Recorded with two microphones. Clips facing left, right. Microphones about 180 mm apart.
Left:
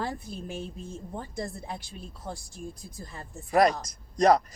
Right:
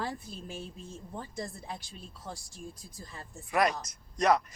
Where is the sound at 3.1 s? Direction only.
35° left (ahead or behind).